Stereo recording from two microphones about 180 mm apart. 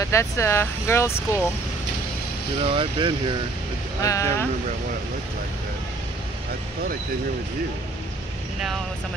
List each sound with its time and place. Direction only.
0.0 s speech: 15° left (ahead or behind)
2.6 s speech: 30° right (ahead or behind)
4.0 s speech: 15° left (ahead or behind)